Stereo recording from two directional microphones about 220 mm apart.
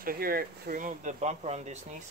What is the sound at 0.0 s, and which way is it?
Speech, 40° right (ahead or behind).